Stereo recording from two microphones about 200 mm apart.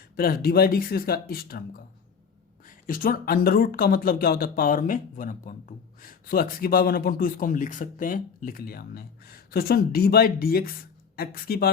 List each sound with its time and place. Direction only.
0.2 s speech: 50° left (ahead or behind)
2.6 s speech: 45° left (ahead or behind)